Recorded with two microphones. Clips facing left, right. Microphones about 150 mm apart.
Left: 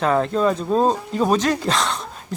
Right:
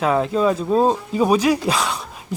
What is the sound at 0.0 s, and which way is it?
Speech, 5° right (ahead or behind).